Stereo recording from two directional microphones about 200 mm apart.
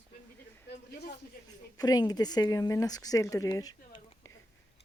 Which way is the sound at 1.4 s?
20° left (ahead or behind).